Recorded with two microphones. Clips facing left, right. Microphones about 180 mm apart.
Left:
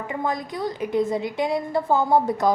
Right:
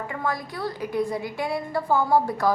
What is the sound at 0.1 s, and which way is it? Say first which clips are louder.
A woman's voice: left 5 dB; 20° left (ahead or behind).